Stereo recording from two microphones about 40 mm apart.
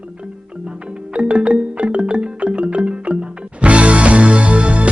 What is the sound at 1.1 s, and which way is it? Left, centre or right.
Music, right.